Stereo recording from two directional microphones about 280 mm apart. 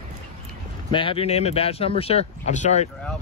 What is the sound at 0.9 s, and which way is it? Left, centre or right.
Speech, centre.